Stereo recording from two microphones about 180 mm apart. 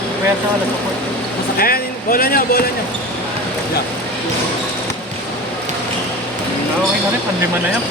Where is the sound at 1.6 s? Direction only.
55° left (ahead or behind).